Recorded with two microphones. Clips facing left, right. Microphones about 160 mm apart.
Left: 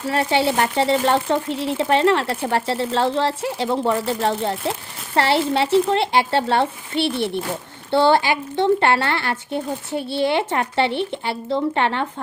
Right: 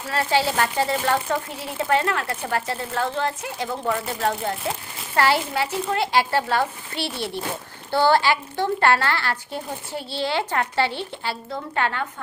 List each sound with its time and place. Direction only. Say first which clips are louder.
0.1 s speech: left 3 dB; 20° left (ahead or behind)